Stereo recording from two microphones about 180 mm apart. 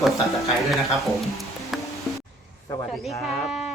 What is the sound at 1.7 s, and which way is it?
Music, centre (ahead or behind).